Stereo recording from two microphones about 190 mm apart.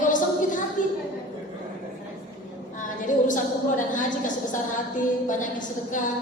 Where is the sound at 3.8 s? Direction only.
45° left (ahead or behind).